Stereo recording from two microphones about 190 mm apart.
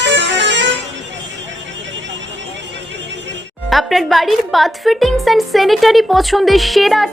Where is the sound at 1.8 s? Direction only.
75° right (ahead or behind).